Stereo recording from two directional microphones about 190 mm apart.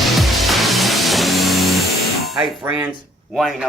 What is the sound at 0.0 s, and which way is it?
Music, centre (ahead or behind).